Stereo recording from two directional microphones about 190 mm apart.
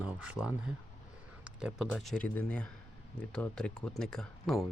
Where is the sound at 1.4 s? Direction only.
5° right (ahead or behind).